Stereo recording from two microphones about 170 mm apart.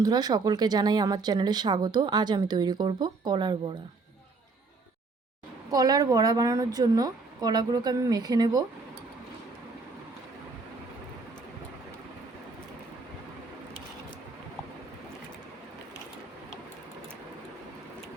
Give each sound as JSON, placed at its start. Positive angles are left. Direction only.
{"t": 0.0, "sound": "speech", "side_deg": -25}
{"t": 5.7, "sound": "speech", "side_deg": -20}